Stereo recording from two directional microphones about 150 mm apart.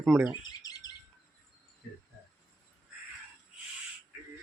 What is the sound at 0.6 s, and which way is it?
Bird vocalization, 25° left (ahead or behind).